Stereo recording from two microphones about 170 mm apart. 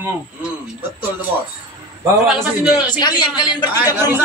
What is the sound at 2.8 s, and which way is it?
Speech, 25° left (ahead or behind).